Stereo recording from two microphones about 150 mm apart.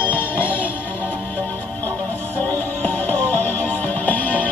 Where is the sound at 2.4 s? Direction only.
10° left (ahead or behind).